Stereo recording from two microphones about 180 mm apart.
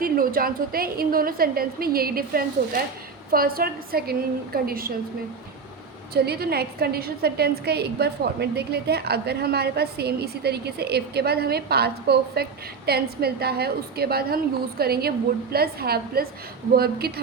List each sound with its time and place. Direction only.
0.0 s a woman's voice: 55° right (ahead or behind)
6.2 s a woman's voice: 60° right (ahead or behind)